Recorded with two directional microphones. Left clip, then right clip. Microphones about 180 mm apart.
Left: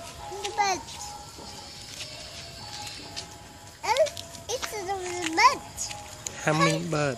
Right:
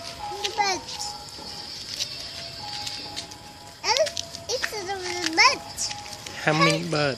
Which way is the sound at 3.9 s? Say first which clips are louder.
Left 1 dB; 15° left (ahead or behind).